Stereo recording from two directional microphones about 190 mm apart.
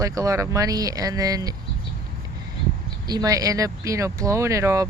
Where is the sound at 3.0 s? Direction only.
20° right (ahead or behind).